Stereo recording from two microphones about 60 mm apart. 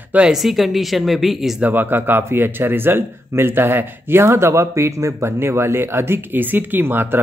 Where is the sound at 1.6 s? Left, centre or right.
Right.